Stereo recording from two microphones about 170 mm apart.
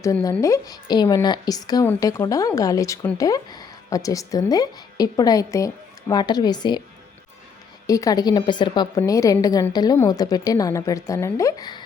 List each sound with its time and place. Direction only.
0.0 s speech: 15° left (ahead or behind)
7.9 s speech: 20° left (ahead or behind)